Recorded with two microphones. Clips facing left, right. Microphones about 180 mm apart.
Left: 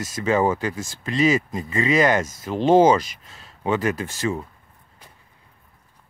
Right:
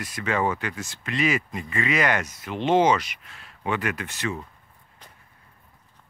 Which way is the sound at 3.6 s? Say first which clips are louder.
Left 5 dB; 25° left (ahead or behind).